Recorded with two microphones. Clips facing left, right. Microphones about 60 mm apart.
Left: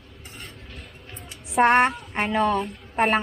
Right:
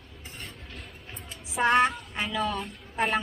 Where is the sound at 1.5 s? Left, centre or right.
Left.